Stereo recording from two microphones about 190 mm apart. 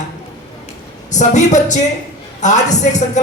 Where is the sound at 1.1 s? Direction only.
40° left (ahead or behind).